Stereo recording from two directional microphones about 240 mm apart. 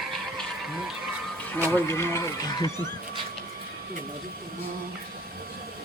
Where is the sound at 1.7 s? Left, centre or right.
Centre.